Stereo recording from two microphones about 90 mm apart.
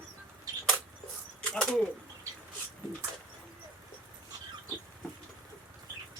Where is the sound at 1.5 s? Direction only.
10° left (ahead or behind).